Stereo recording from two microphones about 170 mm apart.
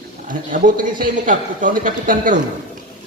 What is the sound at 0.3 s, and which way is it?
A man's voice, 50° right (ahead or behind).